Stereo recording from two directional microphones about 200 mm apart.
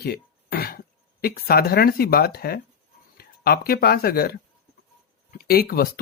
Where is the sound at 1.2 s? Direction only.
50° left (ahead or behind).